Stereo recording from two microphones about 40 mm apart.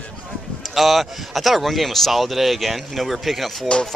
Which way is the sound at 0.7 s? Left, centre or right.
Centre.